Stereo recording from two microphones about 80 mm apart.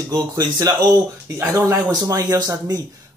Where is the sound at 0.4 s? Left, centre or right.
Right.